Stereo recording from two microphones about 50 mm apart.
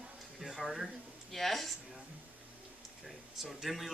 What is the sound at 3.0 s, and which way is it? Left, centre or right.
Speech, centre.